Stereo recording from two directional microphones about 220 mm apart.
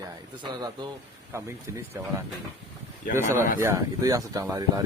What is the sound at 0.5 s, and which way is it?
Speech, 20° right (ahead or behind).